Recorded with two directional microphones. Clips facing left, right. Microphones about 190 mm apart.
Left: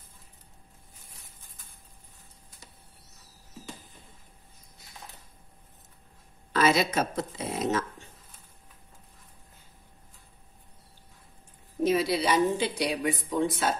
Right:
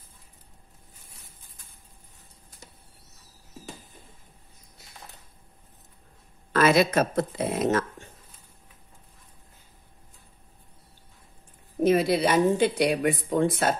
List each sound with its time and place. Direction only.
6.5 s speech: 55° right (ahead or behind)
11.8 s speech: 55° right (ahead or behind)